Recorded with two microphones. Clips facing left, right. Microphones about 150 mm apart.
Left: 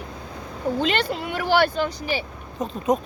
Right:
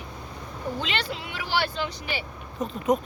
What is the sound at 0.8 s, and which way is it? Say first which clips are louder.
Speech: left 7 dB; 50° left (ahead or behind).